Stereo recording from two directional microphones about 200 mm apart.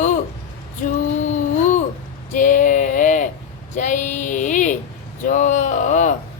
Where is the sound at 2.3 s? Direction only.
40° left (ahead or behind).